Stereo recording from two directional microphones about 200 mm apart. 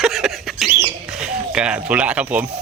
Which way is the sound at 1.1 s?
5° right (ahead or behind).